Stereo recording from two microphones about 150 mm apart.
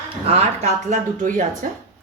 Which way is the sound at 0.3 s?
45° right (ahead or behind).